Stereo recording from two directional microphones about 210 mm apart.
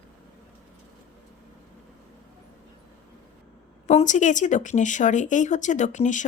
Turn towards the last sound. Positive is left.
turn(degrees=35)  # may be behind; listen again after turning